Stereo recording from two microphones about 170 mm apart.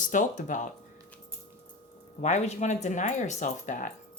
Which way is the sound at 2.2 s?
45° left (ahead or behind).